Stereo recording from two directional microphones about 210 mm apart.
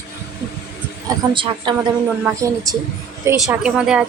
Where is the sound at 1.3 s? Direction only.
20° right (ahead or behind).